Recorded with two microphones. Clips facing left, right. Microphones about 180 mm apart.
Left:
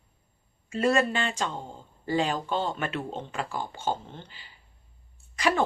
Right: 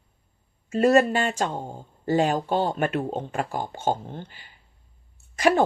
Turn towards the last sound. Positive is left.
turn(degrees=-45)  # may be behind; listen again after turning